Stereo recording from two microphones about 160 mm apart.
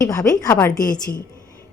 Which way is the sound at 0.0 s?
20° left (ahead or behind).